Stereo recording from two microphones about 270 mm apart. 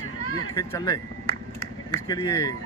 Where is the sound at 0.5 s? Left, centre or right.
Centre.